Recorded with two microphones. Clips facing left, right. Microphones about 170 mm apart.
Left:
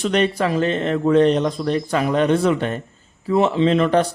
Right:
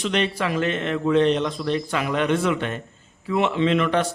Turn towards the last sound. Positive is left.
turn(degrees=35)  # may be behind; listen again after turning